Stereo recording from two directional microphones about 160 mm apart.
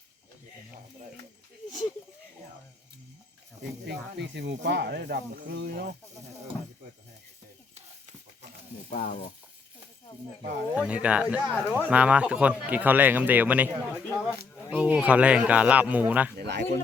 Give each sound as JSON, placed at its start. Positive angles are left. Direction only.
{"t": 3.8, "sound": "speech", "side_deg": -90}
{"t": 7.8, "sound": "stir", "side_deg": -45}
{"t": 8.9, "sound": "stir", "side_deg": 55}
{"t": 10.8, "sound": "speech", "side_deg": -10}
{"t": 16.4, "sound": "speech", "side_deg": -90}